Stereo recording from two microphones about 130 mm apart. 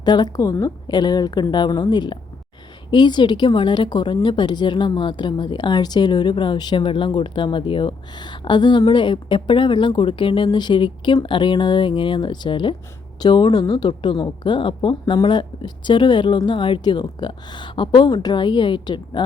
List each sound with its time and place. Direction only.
0.0 s a woman's voice: 35° left (ahead or behind)